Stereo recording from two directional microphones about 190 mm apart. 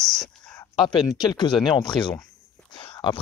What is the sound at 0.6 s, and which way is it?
Speech, 25° left (ahead or behind).